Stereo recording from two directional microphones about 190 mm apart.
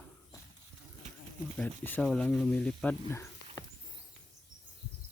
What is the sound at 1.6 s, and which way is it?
Speech, 10° left (ahead or behind).